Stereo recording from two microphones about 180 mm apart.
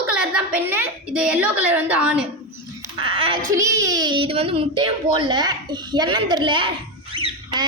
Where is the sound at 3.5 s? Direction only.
15° right (ahead or behind).